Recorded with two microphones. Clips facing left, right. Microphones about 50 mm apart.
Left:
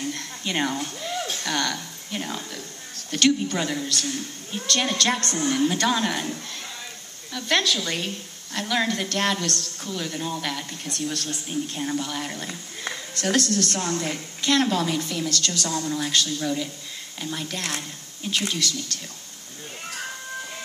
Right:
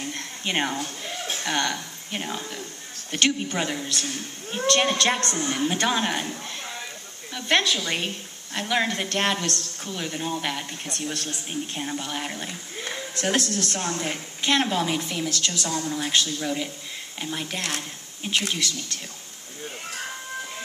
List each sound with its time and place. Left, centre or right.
0.0 s a sound: right
2.2 s a woman's voice: centre
7.3 s a woman's voice: right